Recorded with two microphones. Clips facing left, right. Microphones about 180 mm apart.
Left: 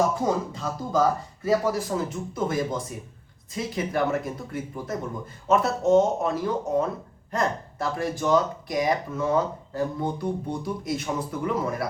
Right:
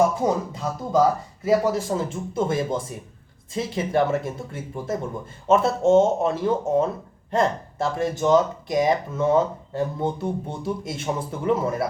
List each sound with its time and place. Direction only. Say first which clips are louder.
0.3 s speech: right 2 dB; 25° right (ahead or behind)